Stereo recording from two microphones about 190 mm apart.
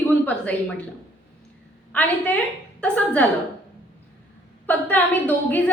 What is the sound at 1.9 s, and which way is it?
A woman's voice, 10° left (ahead or behind).